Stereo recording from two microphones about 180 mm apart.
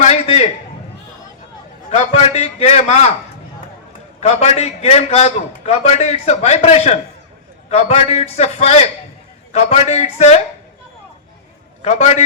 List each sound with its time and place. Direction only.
0.0 s a sound: 35° left (ahead or behind)
2.0 s a man's voice: 35° left (ahead or behind)
4.2 s a man's voice: 35° left (ahead or behind)
11.8 s a man's voice: 35° left (ahead or behind)